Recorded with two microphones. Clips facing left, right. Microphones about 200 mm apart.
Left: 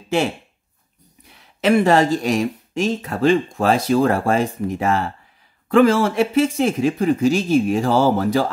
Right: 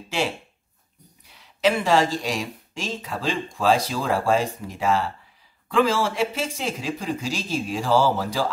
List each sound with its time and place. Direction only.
1.6 s speech: 55° left (ahead or behind)